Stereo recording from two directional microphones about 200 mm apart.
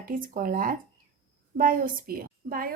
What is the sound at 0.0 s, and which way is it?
A woman's voice, 45° right (ahead or behind).